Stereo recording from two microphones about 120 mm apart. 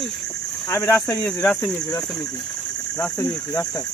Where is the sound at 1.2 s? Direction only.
15° left (ahead or behind).